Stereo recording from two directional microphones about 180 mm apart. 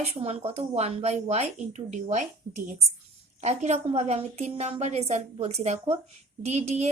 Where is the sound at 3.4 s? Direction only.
35° right (ahead or behind).